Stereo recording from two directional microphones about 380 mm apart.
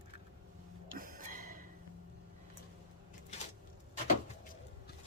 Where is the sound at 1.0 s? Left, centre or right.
Right.